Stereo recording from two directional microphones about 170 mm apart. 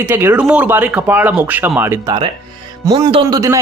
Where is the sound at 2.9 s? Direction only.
25° right (ahead or behind).